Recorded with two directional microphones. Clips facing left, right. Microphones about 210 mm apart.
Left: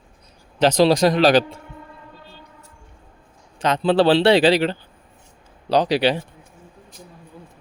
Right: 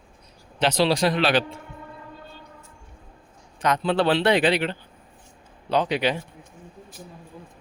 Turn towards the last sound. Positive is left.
turn(degrees=30)  # may be behind; listen again after turning